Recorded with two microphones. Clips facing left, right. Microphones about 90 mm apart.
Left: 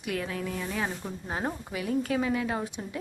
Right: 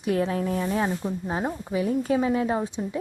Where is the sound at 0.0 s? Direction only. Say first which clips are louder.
Right 8 dB; 30° right (ahead or behind).